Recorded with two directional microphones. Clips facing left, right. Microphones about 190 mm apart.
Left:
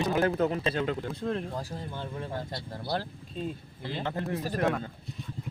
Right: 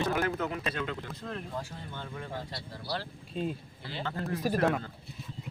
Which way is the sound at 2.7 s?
50° left (ahead or behind).